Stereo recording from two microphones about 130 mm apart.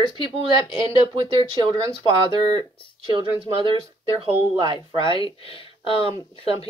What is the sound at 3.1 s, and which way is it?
Speech, 40° right (ahead or behind).